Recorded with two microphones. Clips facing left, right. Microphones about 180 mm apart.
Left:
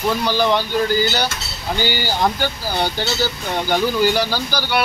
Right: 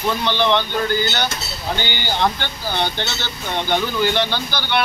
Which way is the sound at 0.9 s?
5° left (ahead or behind).